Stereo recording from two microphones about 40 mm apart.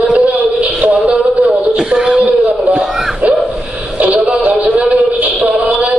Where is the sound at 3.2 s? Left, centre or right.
Right.